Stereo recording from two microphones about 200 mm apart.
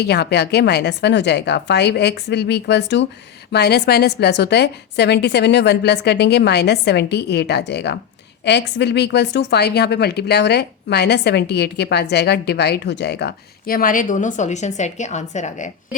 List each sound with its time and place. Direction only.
0.0 s speech: 55° left (ahead or behind); by 16.0 s 40° left (ahead or behind)